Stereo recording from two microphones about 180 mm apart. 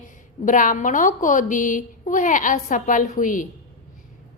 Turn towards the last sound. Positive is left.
turn(degrees=45)  # may be behind; listen again after turning